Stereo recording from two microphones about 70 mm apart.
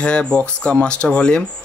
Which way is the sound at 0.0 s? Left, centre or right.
Centre.